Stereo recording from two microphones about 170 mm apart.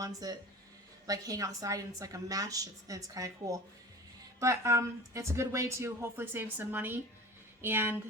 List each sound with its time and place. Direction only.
0.0 s a woman's voice: 20° right (ahead or behind)